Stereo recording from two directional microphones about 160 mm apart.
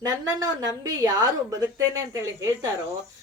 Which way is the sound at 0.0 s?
25° right (ahead or behind).